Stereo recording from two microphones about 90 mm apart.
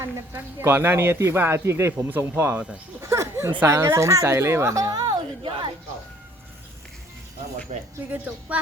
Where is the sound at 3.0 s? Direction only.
30° right (ahead or behind).